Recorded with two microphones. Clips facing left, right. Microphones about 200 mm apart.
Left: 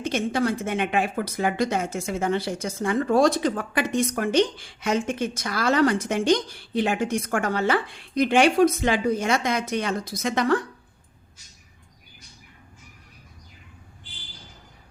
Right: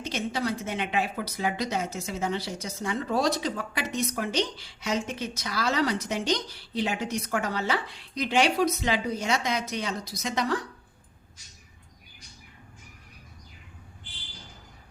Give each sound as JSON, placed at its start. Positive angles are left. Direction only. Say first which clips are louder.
{"t": 0.0, "sound": "speech", "louder": "left 6 dB", "side_deg": 55}